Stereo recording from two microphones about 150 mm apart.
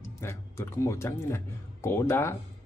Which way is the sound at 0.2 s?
15° left (ahead or behind).